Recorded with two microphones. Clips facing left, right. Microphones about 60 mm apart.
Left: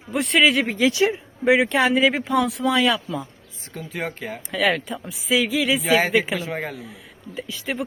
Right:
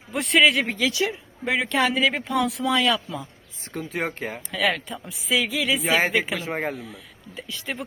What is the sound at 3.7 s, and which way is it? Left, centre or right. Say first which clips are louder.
Speech: right 1 dB; right.